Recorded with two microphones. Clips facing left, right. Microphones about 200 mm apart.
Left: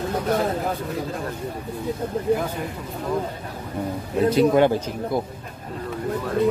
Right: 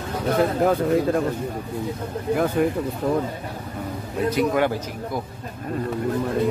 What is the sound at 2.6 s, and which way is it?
Speech, 60° right (ahead or behind).